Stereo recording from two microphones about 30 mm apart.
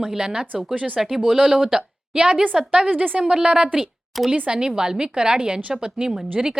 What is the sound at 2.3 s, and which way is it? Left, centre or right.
Speech, right.